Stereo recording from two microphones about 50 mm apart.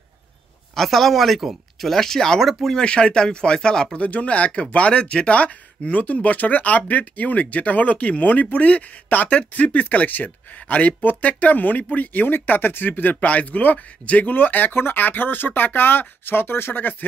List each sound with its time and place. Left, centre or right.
0.7 s speech: centre
2.8 s speech: centre; by 16.9 s left